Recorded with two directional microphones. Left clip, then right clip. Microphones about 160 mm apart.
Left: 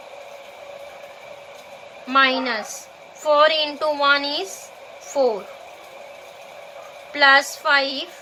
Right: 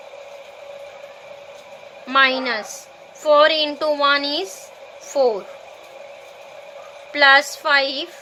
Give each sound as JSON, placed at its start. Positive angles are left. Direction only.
{"t": 2.0, "sound": "a woman's voice", "side_deg": -40}
{"t": 7.1, "sound": "a woman's voice", "side_deg": -40}